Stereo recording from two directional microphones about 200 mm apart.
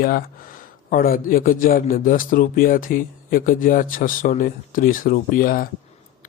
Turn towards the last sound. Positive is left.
turn(degrees=45)  # may be behind; listen again after turning